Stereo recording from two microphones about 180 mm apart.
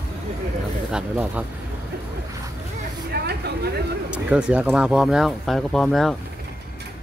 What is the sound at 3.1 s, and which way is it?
Vehicle, 65° right (ahead or behind).